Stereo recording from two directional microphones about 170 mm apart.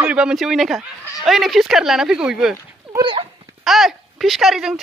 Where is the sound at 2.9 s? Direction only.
30° right (ahead or behind).